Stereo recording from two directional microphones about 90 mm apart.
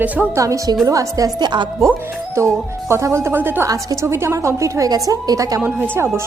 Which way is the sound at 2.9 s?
30° right (ahead or behind).